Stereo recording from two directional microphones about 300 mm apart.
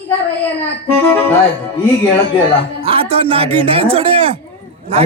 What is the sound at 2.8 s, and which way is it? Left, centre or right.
A man's voice, centre.